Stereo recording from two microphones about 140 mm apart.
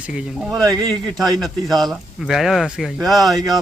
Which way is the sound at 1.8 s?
Centre (ahead or behind).